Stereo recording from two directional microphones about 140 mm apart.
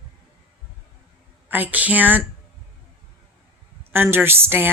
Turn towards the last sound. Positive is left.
turn(degrees=-15)  # may be behind; listen again after turning